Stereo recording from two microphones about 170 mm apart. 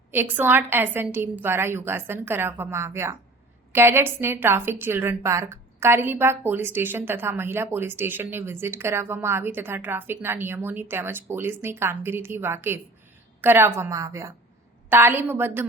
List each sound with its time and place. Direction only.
0.1 s speech: 10° right (ahead or behind)